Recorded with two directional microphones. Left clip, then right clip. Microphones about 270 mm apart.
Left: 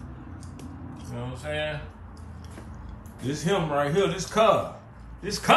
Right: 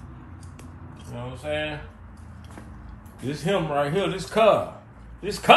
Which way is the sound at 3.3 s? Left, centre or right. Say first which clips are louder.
Right 1 dB; centre.